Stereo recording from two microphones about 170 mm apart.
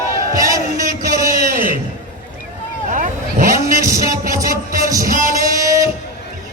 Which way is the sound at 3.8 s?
20° right (ahead or behind).